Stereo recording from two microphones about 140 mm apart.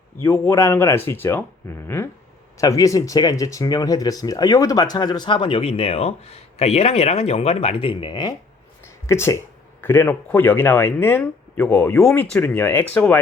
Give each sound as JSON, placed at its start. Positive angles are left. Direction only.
{"t": 0.2, "sound": "speech", "side_deg": 20}
{"t": 8.8, "sound": "a sound", "side_deg": 20}
{"t": 9.8, "sound": "speech", "side_deg": 15}